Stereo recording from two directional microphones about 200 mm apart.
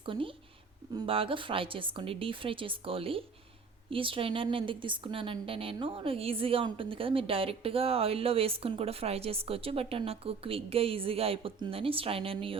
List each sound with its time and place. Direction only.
0.0 s a woman's voice: 25° right (ahead or behind)